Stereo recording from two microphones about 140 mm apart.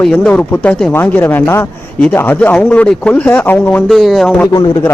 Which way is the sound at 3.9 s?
Centre (ahead or behind).